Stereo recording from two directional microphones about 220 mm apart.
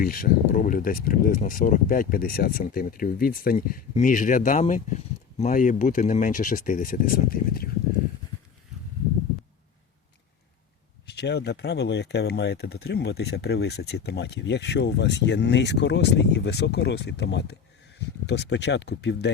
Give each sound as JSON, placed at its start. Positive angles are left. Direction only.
{"t": 0.0, "sound": "speech", "side_deg": 40}
{"t": 11.1, "sound": "speech", "side_deg": 50}